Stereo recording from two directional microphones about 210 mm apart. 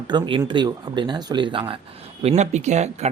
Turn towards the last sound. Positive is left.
turn(degrees=-30)  # may be behind; listen again after turning